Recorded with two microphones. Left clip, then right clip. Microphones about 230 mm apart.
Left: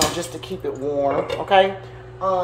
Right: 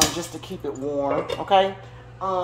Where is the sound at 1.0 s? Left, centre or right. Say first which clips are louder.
Left 3 dB; right.